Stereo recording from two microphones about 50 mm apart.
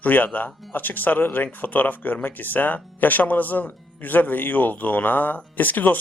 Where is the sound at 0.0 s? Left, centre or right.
Left.